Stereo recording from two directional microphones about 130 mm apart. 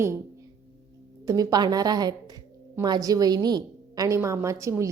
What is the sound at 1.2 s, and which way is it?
A woman's voice, 30° right (ahead or behind).